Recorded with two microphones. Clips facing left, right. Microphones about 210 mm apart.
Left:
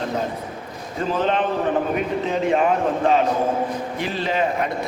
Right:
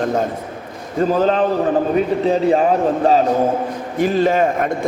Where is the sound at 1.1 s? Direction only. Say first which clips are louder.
Right 4 dB; 40° right (ahead or behind).